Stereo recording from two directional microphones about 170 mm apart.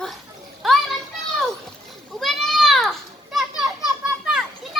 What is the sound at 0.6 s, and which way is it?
Speech, centre (ahead or behind).